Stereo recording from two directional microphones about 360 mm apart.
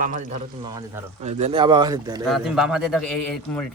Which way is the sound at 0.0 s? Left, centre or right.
Right.